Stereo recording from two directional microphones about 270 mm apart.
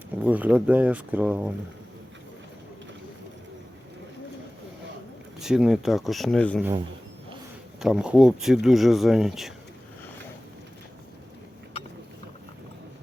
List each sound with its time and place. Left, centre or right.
0.2 s speech: centre
5.4 s speech: centre
7.8 s speech: centre